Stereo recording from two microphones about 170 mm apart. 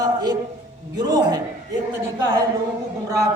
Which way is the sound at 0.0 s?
25° right (ahead or behind).